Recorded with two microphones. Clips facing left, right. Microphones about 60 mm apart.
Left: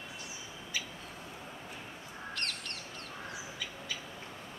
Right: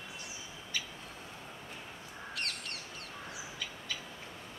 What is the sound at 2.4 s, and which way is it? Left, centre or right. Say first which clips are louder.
Crow: even; centre.